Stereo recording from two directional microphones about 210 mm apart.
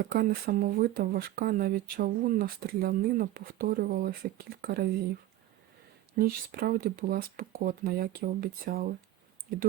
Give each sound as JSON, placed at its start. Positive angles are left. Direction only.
{"t": 0.0, "sound": "speech", "side_deg": -45}
{"t": 6.1, "sound": "speech", "side_deg": -45}